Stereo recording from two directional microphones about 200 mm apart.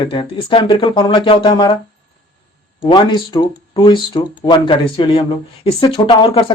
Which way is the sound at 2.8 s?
20° left (ahead or behind).